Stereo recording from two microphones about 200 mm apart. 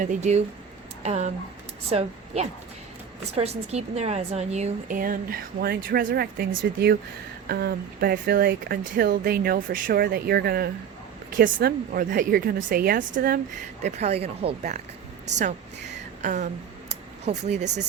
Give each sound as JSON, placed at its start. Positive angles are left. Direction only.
{"t": 0.0, "sound": "a woman's voice", "side_deg": -35}
{"t": 16.2, "sound": "a woman's voice", "side_deg": -35}